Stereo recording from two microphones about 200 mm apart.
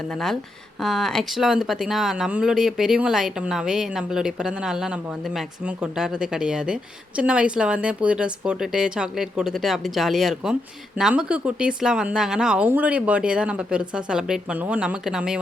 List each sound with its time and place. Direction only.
0.1 s speech: centre (ahead or behind)